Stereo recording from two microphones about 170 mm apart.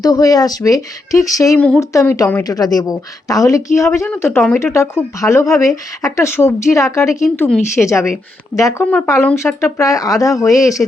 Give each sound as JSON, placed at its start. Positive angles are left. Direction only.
{"t": 0.0, "sound": "a woman's voice", "side_deg": 20}
{"t": 1.5, "sound": "a woman's voice", "side_deg": 5}
{"t": 1.8, "sound": "a woman's voice", "side_deg": 20}
{"t": 8.8, "sound": "a woman's voice", "side_deg": 5}